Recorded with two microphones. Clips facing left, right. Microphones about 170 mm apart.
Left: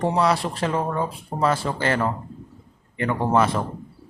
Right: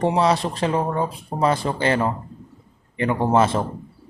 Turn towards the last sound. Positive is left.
turn(degrees=-25)  # may be behind; listen again after turning